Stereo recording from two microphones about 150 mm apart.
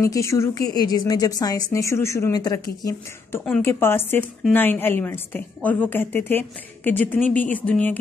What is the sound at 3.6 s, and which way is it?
A woman's voice, 15° left (ahead or behind).